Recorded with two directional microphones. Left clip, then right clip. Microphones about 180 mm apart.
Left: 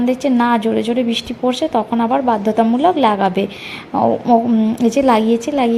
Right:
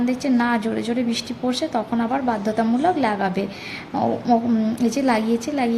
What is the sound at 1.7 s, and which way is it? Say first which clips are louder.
A woman's voice: left 7 dB; 15° left (ahead or behind).